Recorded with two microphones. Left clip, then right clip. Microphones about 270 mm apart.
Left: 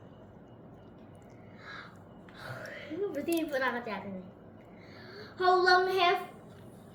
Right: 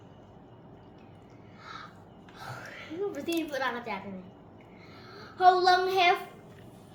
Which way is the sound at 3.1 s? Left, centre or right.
Centre.